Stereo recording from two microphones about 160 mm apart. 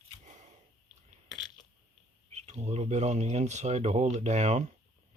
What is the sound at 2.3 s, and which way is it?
Speech, 45° right (ahead or behind).